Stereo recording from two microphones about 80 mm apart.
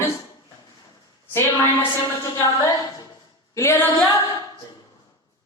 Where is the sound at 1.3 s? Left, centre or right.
Left.